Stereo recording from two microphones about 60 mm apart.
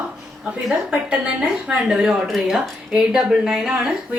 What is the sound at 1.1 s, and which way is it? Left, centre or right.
Speech, centre.